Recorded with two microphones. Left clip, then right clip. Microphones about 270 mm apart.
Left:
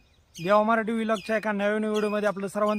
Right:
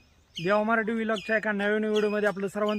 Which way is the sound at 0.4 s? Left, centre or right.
Centre.